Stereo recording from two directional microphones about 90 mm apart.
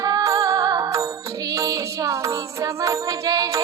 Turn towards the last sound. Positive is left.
turn(degrees=-40)  # may be behind; listen again after turning